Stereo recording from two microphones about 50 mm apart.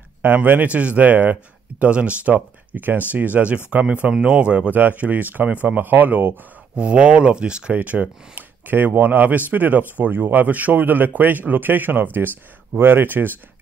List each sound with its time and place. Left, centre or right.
0.2 s speech: right
6.7 s speech: right
7.7 s speech: right